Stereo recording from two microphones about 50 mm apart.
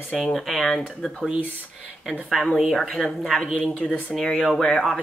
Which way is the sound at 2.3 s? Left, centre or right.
Centre.